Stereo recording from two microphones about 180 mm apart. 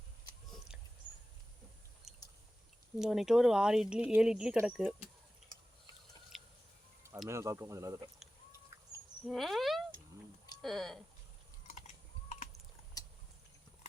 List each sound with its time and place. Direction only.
2.1 s chewing: centre (ahead or behind)
3.0 s speech: centre (ahead or behind)
6.3 s a sound: centre (ahead or behind)
7.3 s speech: 15° right (ahead or behind)
9.2 s speech: centre (ahead or behind)
13.0 s a sound: 20° left (ahead or behind)